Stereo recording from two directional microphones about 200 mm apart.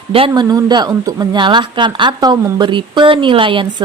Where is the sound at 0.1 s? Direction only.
25° right (ahead or behind).